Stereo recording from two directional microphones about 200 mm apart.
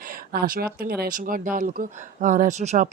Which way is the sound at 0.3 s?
50° right (ahead or behind).